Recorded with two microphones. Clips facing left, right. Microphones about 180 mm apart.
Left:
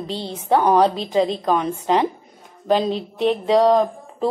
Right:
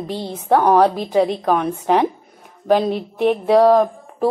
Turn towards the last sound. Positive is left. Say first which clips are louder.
# right 3 dB
turn(degrees=-10)  # may be behind; listen again after turning